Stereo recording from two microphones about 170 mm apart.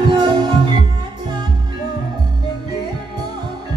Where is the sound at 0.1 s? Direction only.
25° right (ahead or behind).